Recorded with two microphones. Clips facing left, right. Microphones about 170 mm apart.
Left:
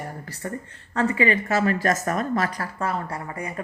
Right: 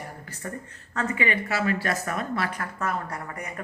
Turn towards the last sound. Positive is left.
turn(degrees=30)  # may be behind; listen again after turning